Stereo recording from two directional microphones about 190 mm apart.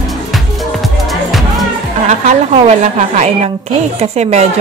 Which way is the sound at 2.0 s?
40° right (ahead or behind).